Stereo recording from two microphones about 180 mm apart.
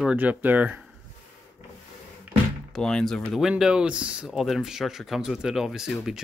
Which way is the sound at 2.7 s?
5° left (ahead or behind).